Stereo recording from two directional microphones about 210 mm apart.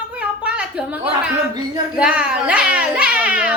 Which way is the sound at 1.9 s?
5° right (ahead or behind).